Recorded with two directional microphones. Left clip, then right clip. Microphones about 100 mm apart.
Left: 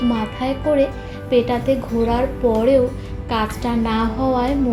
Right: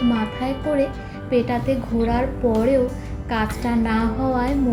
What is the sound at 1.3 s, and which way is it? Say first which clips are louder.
Speech: left 4 dB; 30° left (ahead or behind).